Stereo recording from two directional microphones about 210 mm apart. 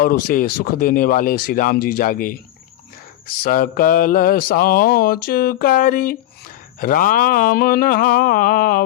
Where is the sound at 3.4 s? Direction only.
45° left (ahead or behind).